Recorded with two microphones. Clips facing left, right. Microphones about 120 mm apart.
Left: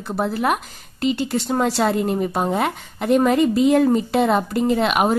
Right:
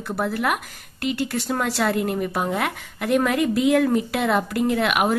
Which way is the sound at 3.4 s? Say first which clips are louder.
Left 4 dB; 75° right (ahead or behind).